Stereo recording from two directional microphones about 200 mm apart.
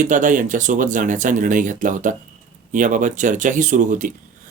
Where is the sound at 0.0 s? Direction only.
40° right (ahead or behind).